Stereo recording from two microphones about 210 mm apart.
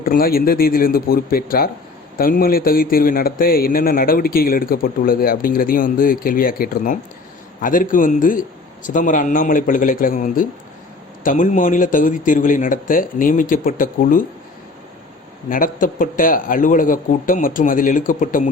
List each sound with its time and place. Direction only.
0.0 s a man's voice: 45° left (ahead or behind)
15.4 s speech: 40° left (ahead or behind)